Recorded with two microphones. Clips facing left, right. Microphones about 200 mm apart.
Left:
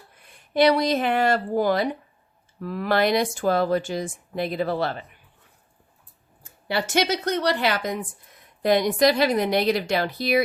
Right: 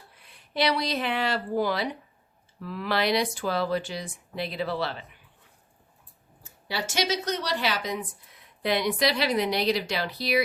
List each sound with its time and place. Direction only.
0.2 s speech: 50° left (ahead or behind)
6.4 s speech: 55° left (ahead or behind)